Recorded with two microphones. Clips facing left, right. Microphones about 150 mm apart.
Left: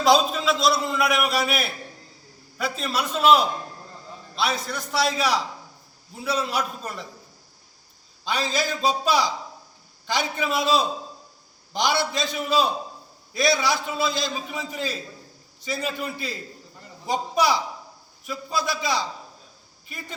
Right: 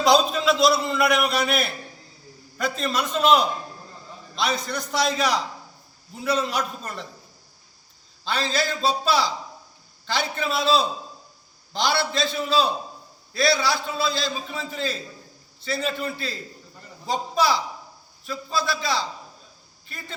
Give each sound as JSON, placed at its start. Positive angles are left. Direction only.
{"t": 0.0, "sound": "a man's voice", "side_deg": 0}
{"t": 8.2, "sound": "a man's voice", "side_deg": 15}